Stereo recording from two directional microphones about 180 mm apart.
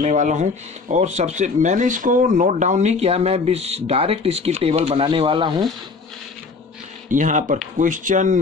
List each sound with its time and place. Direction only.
0.0 s speech: 45° right (ahead or behind); by 5.7 s 25° right (ahead or behind)
7.1 s speech: 45° right (ahead or behind)